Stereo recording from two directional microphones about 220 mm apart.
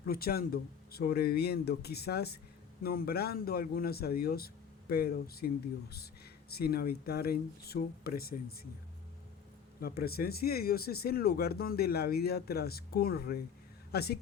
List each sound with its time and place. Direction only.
0.0 s speech: 45° left (ahead or behind)
6.5 s speech: 45° left (ahead or behind)
9.8 s speech: 45° left (ahead or behind)